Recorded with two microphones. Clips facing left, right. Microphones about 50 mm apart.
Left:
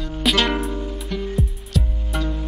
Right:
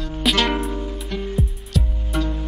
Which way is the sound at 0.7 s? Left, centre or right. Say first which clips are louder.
Even; right.